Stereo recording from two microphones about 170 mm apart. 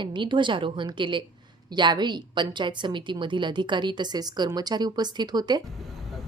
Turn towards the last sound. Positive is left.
turn(degrees=-25)  # may be behind; listen again after turning